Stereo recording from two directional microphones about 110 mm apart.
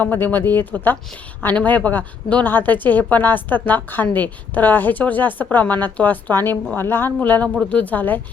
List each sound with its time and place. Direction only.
0.0 s a woman's voice: 15° left (ahead or behind)